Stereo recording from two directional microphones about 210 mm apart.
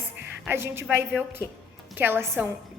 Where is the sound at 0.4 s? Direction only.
10° right (ahead or behind).